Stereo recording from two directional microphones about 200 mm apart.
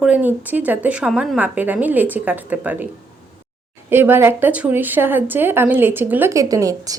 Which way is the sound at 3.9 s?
10° right (ahead or behind).